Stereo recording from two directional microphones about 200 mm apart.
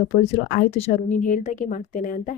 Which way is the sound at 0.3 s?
30° left (ahead or behind).